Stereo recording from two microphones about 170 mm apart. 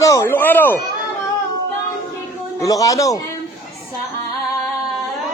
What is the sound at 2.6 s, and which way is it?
Speech, 20° left (ahead or behind).